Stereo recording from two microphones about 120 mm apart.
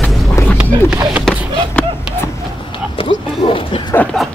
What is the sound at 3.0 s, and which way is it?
Speech, 50° left (ahead or behind).